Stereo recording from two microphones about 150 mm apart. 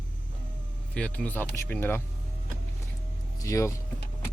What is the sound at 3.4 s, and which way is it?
Speech, 20° left (ahead or behind).